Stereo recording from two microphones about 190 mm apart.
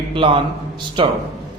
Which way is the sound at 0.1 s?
25° right (ahead or behind).